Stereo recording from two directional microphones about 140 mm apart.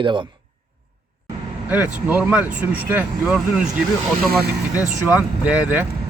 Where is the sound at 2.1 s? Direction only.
10° right (ahead or behind).